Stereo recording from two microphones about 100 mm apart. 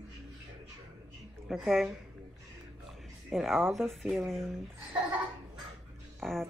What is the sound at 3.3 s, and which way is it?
Speech, centre (ahead or behind).